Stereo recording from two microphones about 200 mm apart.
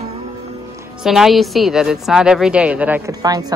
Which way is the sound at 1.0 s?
Centre (ahead or behind).